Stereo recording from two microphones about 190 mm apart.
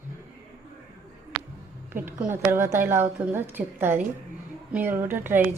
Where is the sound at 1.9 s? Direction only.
10° right (ahead or behind).